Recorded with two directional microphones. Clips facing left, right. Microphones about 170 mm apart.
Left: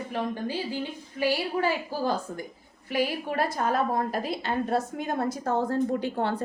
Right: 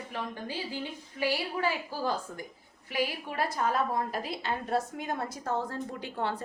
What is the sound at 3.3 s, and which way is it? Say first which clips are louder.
A woman's voice: left 4 dB; 55° left (ahead or behind).